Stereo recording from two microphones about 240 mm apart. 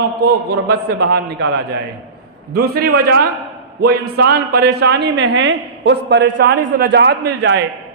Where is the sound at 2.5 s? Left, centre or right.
Right.